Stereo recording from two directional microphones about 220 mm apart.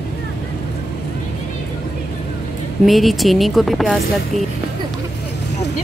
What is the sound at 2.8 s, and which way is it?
A woman's voice, centre (ahead or behind).